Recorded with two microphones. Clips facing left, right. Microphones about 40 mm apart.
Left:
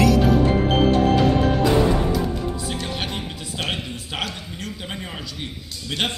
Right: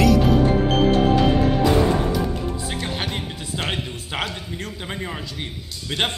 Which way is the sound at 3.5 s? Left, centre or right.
Right.